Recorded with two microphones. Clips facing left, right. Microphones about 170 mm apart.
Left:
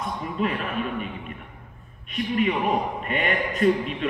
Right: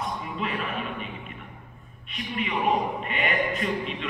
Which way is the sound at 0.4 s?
45° left (ahead or behind).